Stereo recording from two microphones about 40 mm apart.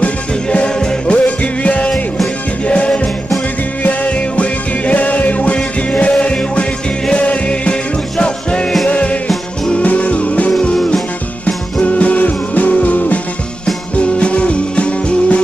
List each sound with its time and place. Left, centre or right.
0.0 s music: left
4.1 s music: left
8.8 s music: left